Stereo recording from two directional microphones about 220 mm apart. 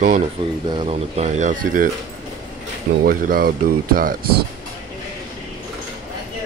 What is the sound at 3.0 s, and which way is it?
Speech, 40° right (ahead or behind).